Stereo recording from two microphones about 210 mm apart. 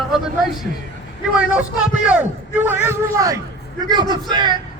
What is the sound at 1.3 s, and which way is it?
A man's voice, 5° right (ahead or behind).